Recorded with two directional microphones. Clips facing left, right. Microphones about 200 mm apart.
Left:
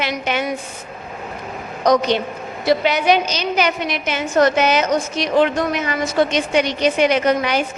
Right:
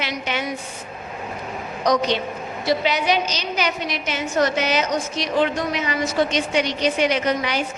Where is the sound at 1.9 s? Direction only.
50° left (ahead or behind).